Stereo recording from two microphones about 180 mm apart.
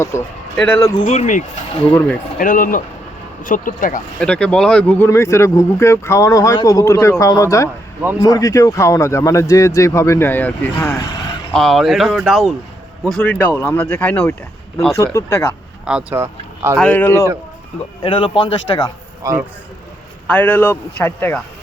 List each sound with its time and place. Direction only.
0.1 s speech: 15° left (ahead or behind)
0.8 s a man's voice: 20° left (ahead or behind)
1.0 s speech: 40° left (ahead or behind)
1.9 s speech: 15° left (ahead or behind)
2.4 s speech: 50° left (ahead or behind)
4.2 s speech: 5° left (ahead or behind)
11.5 s speech: centre (ahead or behind)
15.8 s speech: 5° right (ahead or behind)
16.7 s speech: 10° left (ahead or behind)
18.0 s a man's voice: 30° left (ahead or behind)
19.2 s speech: 15° right (ahead or behind)
20.2 s speech: 10° left (ahead or behind)